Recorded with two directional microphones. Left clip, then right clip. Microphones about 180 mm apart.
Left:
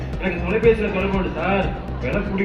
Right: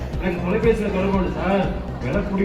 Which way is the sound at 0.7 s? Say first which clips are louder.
Left 3 dB; 70° right (ahead or behind).